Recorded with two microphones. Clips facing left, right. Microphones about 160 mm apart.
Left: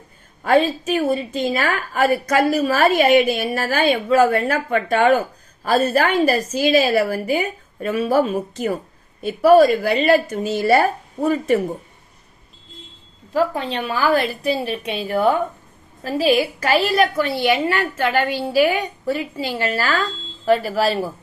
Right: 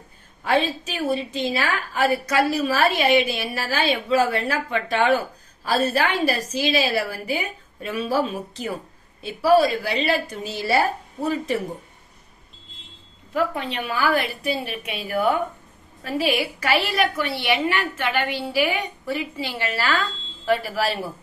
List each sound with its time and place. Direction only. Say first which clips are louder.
0.4 s a woman's voice: left 5 dB; 50° left (ahead or behind)
13.3 s a woman's voice: left 4 dB; 30° left (ahead or behind)